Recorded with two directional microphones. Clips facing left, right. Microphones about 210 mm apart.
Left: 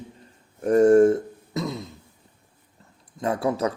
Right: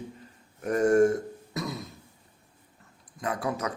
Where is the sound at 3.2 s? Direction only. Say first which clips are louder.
Left 7 dB; 30° left (ahead or behind).